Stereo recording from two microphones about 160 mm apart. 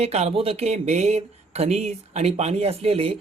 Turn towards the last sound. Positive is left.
turn(degrees=-35)  # may be behind; listen again after turning